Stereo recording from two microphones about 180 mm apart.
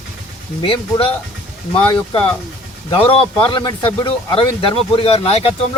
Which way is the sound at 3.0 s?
30° left (ahead or behind).